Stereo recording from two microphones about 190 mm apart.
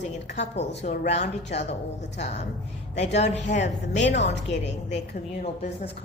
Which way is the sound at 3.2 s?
35° left (ahead or behind).